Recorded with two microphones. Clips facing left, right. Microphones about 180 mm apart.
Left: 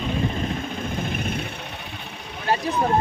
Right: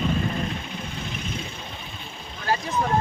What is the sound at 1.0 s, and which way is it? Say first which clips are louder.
Vehicle: left 5 dB; 55° left (ahead or behind).